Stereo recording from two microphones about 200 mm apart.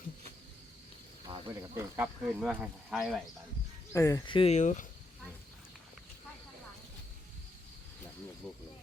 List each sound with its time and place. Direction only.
1.3 s a sound: 25° right (ahead or behind)
1.7 s speech: 5° right (ahead or behind)
3.9 s speech: 15° left (ahead or behind); by 4.9 s 35° left (ahead or behind)